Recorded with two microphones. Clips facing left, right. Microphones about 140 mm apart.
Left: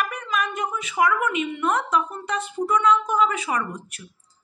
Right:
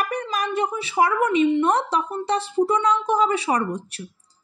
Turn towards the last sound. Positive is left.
turn(degrees=-35)  # may be behind; listen again after turning